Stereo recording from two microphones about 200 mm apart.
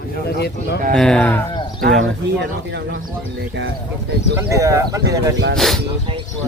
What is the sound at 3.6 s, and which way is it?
Speech, 60° right (ahead or behind).